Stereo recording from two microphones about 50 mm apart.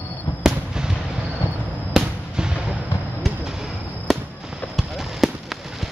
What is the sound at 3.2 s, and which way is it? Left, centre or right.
Basketball bounce, centre.